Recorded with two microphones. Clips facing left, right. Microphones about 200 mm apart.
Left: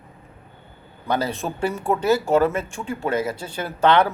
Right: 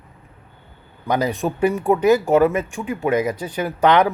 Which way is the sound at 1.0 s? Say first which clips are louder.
Right 3 dB; 15° right (ahead or behind).